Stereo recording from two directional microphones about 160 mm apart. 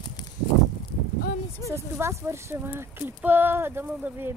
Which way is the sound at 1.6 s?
15° right (ahead or behind).